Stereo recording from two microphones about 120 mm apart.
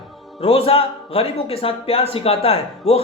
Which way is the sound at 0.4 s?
55° left (ahead or behind).